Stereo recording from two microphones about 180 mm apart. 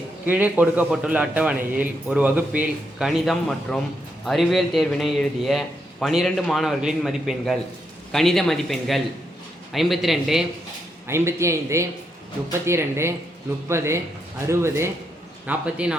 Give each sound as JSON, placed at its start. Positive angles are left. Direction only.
{"t": 0.3, "sound": "speech", "side_deg": -10}
{"t": 11.1, "sound": "speech", "side_deg": -15}